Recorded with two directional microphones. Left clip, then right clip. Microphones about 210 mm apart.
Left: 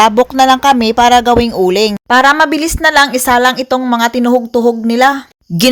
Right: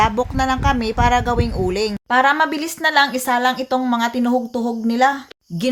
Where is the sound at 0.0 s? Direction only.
40° left (ahead or behind).